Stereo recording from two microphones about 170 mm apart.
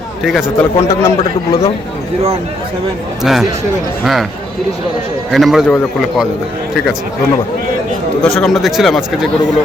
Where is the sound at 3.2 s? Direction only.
Centre (ahead or behind).